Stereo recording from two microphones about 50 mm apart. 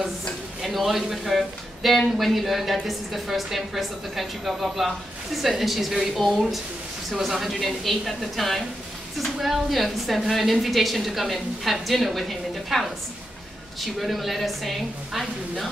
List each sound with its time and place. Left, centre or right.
0.6 s speech: centre
14.0 s speech: centre